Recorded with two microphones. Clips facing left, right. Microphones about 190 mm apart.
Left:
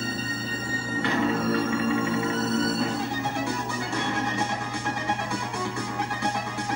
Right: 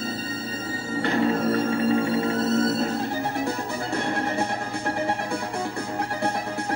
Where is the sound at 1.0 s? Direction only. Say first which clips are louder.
Right 3 dB; 40° right (ahead or behind).